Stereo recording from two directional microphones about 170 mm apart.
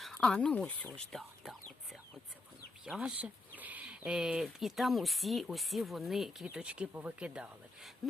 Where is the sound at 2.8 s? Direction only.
5° right (ahead or behind).